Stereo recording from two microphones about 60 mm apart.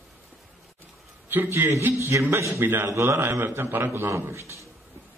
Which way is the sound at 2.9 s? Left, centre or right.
Right.